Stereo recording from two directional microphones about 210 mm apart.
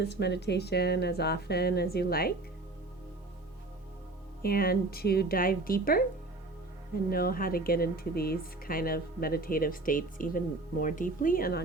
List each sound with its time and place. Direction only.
0.0 s speech: 55° left (ahead or behind)
4.4 s speech: 45° left (ahead or behind)